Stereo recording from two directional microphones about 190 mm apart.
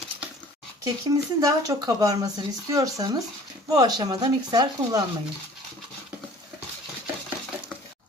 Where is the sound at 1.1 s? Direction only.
20° right (ahead or behind).